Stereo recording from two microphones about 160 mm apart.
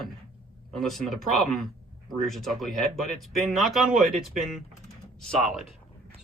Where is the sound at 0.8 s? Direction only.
Centre (ahead or behind).